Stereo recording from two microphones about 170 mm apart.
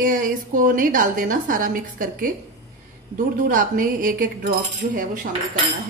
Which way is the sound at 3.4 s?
55° right (ahead or behind).